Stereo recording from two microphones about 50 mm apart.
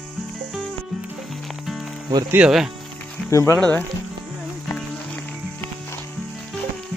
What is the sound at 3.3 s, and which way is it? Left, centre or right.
Speech, left.